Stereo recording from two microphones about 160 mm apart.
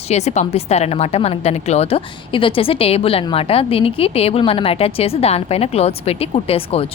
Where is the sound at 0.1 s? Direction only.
45° left (ahead or behind).